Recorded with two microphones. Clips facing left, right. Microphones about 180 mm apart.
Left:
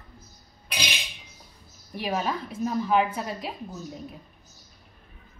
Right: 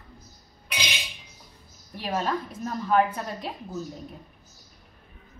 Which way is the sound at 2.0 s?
10° left (ahead or behind).